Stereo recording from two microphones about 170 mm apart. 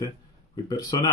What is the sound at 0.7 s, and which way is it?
Speech, 25° left (ahead or behind).